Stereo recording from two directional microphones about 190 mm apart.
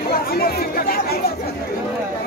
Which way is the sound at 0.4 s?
55° left (ahead or behind).